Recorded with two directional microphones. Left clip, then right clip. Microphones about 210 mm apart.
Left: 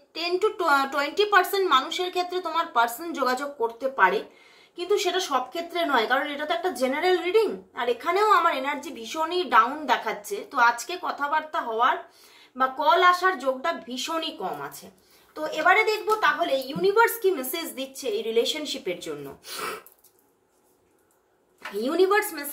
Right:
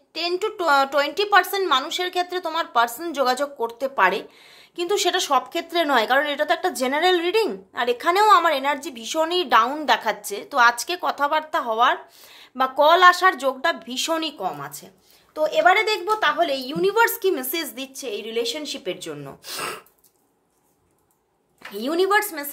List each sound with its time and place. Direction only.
0.1 s a woman's voice: 35° right (ahead or behind)
19.5 s a woman's voice: 50° right (ahead or behind)
21.7 s a woman's voice: 35° right (ahead or behind)